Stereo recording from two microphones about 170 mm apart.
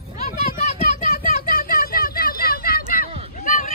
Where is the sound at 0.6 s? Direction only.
50° left (ahead or behind).